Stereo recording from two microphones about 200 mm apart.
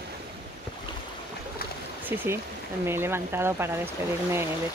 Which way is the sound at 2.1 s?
10° right (ahead or behind).